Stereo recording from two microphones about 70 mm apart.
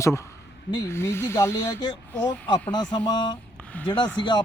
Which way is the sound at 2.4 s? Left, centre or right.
Left.